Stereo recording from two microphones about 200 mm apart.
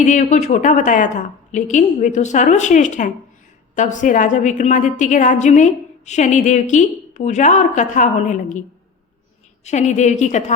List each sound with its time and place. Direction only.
0.0 s a woman's voice: 35° left (ahead or behind)
9.6 s a woman's voice: 35° left (ahead or behind)